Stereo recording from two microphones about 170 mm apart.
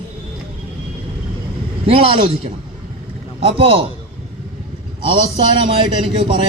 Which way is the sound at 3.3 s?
35° right (ahead or behind).